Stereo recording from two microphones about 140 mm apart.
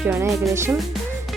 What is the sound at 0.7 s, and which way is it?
Music, centre (ahead or behind).